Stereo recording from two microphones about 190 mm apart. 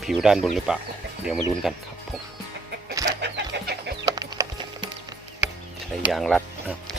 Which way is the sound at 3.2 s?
65° right (ahead or behind).